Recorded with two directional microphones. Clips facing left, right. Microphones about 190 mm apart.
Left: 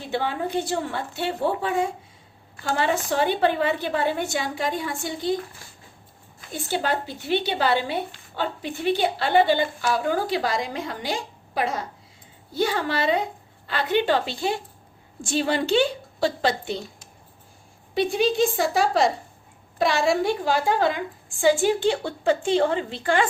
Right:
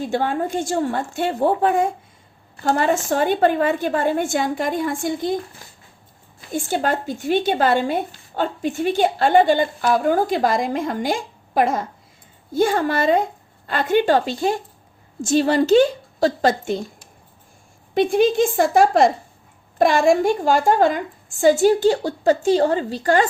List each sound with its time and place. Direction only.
0.0 s speech: 45° right (ahead or behind)
6.5 s a woman's voice: 50° right (ahead or behind)
17.9 s a woman's voice: 50° right (ahead or behind)